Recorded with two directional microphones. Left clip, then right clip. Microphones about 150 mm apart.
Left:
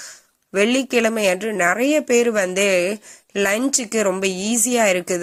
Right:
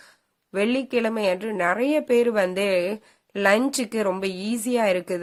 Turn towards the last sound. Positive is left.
turn(degrees=20)  # may be behind; listen again after turning